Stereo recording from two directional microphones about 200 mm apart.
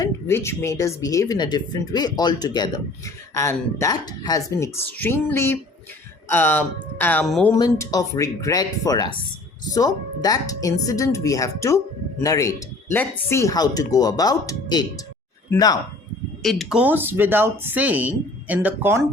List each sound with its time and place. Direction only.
0.0 s speech: 15° left (ahead or behind)
7.5 s speech: 20° left (ahead or behind)
16.4 s speech: centre (ahead or behind)